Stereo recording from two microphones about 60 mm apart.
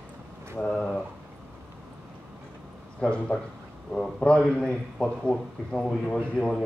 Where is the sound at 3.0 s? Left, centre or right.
Centre.